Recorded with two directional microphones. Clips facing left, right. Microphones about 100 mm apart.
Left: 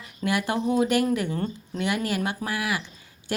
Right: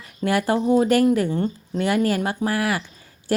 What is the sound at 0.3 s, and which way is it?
A woman's voice, 40° right (ahead or behind).